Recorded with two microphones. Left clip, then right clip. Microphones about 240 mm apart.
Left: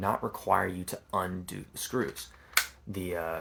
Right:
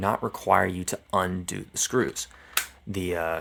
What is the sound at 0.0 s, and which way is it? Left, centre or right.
Speech, right.